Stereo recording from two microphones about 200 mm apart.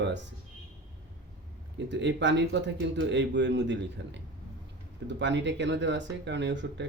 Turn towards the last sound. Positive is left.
turn(degrees=-65)  # may be behind; listen again after turning